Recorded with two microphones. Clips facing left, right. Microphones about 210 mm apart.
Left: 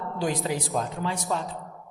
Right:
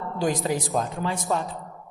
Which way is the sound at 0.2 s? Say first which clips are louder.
Right 3 dB; 45° right (ahead or behind).